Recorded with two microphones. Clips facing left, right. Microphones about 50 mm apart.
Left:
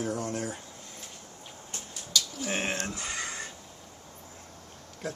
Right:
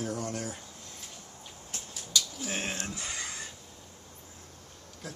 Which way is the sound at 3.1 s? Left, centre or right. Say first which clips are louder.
Left 4 dB; centre.